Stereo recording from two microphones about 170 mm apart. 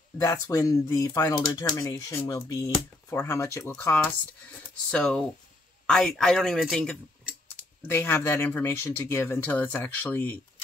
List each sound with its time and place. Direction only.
0.2 s speech: 20° left (ahead or behind); by 7.3 s centre (ahead or behind)
7.9 s speech: 15° left (ahead or behind)